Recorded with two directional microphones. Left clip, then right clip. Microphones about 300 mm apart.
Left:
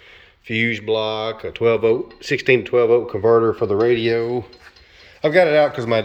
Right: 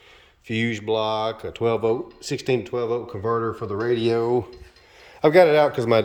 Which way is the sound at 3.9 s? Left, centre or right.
Centre.